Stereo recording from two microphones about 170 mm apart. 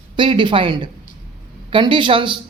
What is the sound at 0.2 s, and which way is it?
A woman's voice, 30° right (ahead or behind).